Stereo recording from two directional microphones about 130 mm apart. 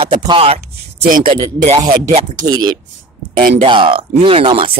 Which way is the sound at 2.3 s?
30° right (ahead or behind).